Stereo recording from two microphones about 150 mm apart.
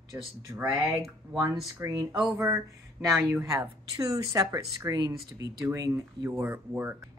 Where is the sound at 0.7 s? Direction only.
20° right (ahead or behind).